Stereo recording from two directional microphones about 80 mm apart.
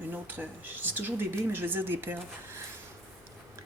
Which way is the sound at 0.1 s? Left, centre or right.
Right.